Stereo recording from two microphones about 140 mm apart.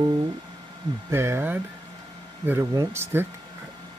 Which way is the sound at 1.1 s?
20° right (ahead or behind).